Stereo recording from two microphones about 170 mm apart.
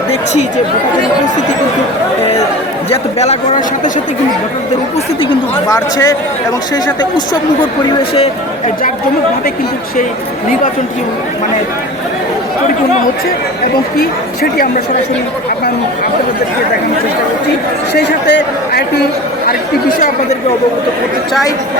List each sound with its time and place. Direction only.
2.9 s a man's voice: 40° left (ahead or behind)
5.6 s a man's voice: 20° left (ahead or behind)
8.1 s speech: 35° left (ahead or behind)
17.9 s a man's voice: 80° left